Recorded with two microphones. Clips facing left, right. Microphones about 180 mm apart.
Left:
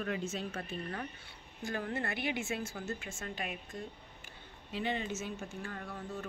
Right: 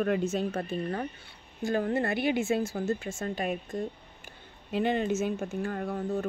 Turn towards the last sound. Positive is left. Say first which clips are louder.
# right 11 dB
turn(degrees=-45)  # may be behind; listen again after turning